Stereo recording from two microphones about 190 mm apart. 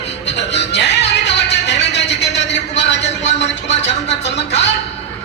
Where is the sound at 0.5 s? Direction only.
65° left (ahead or behind).